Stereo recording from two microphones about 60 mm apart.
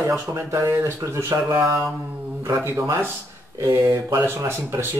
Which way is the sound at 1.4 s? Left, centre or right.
Right.